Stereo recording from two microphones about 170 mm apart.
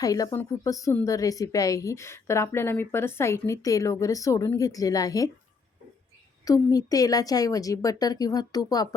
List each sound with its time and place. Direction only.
0.0 s a woman's voice: 20° left (ahead or behind)
6.4 s a woman's voice: 20° left (ahead or behind)